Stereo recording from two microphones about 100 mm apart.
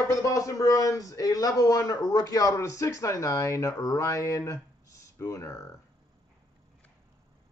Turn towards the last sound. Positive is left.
turn(degrees=30)  # may be behind; listen again after turning